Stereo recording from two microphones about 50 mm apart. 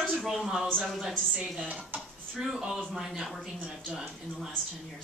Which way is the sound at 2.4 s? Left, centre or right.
Centre.